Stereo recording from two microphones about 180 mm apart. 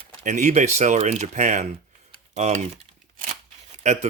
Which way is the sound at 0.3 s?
40° right (ahead or behind).